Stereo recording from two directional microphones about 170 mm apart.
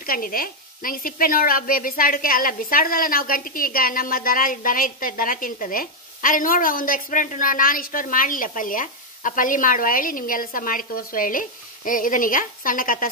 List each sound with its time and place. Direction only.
0.0 s speech: 60° left (ahead or behind)